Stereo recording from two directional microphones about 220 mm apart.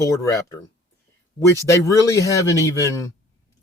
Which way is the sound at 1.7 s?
15° left (ahead or behind).